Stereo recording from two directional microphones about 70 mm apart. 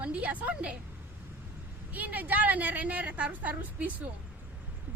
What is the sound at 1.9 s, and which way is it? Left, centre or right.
A woman's voice, right.